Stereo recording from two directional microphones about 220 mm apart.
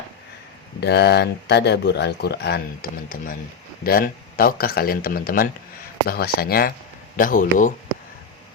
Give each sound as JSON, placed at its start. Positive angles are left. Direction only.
{"t": 0.8, "sound": "speech", "side_deg": 50}